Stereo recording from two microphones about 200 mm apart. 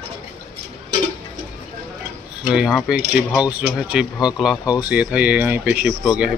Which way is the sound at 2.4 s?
5° right (ahead or behind).